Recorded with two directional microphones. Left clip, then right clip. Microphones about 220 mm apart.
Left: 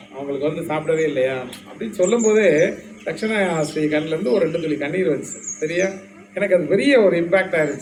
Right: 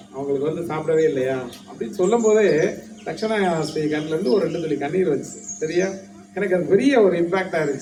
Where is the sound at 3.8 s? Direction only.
45° right (ahead or behind).